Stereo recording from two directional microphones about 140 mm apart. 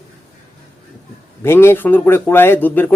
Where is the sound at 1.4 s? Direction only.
15° left (ahead or behind).